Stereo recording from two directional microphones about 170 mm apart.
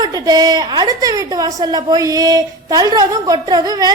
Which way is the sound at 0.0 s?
25° right (ahead or behind).